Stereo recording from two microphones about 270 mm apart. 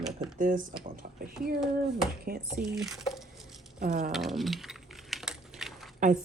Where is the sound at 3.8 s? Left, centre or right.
Right.